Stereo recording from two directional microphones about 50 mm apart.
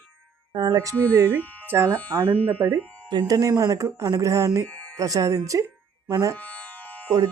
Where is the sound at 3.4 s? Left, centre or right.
Right.